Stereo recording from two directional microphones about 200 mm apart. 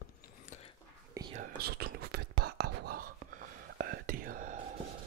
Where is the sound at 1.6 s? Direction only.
50° right (ahead or behind).